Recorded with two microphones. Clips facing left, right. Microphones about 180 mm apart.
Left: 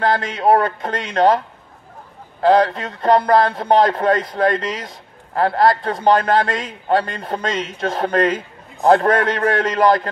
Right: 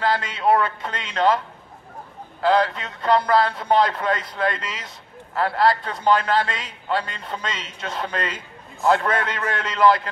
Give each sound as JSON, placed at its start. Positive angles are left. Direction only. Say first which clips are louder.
{"t": 0.0, "sound": "speech", "louder": "left 4 dB", "side_deg": 50}
{"t": 2.4, "sound": "speech", "louder": "left 5 dB", "side_deg": 45}